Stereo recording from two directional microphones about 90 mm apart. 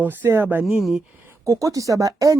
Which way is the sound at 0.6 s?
Centre (ahead or behind).